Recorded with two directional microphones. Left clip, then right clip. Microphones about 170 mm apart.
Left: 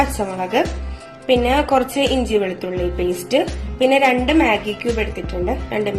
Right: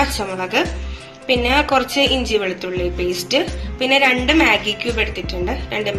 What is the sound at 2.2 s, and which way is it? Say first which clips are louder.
A woman's voice: even; 45° left (ahead or behind).